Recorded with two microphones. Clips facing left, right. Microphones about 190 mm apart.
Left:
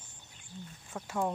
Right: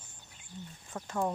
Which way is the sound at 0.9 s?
5° left (ahead or behind).